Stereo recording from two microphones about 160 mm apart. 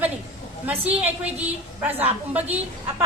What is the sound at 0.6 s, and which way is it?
Speech, 10° right (ahead or behind).